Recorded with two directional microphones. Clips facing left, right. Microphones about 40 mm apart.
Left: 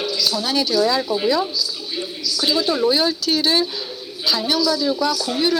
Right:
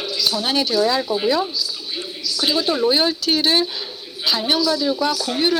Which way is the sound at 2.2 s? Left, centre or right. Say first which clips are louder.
Even; right.